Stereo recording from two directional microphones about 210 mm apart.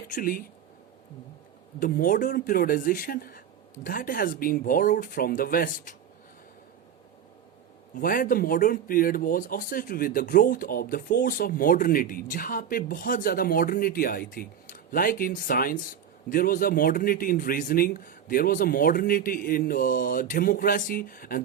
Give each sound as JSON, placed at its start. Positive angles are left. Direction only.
{"t": 0.1, "sound": "speech", "side_deg": 40}
{"t": 1.8, "sound": "speech", "side_deg": 40}
{"t": 7.9, "sound": "speech", "side_deg": 40}